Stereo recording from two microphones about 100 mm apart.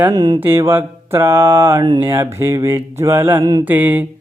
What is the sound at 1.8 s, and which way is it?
Speech, 45° right (ahead or behind).